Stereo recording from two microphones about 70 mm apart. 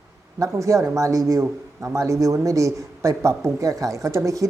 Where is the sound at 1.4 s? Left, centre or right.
Right.